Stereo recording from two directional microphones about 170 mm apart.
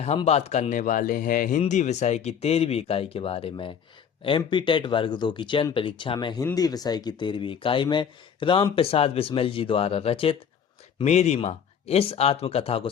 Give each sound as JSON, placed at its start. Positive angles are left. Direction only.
{"t": 0.3, "sound": "speech", "side_deg": 40}